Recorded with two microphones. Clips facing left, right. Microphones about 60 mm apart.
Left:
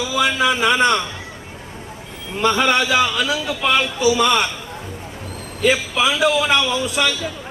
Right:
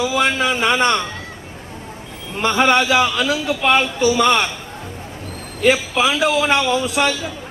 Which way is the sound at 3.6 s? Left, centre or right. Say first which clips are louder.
Right 1 dB; right.